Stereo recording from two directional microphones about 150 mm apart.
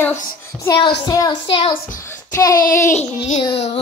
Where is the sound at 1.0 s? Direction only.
25° left (ahead or behind).